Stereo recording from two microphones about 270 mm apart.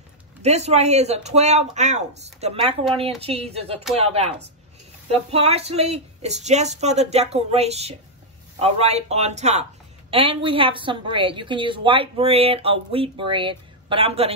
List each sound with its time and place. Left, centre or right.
0.4 s a woman's voice: right